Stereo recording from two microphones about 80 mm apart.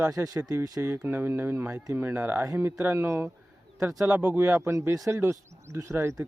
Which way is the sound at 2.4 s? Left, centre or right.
Right.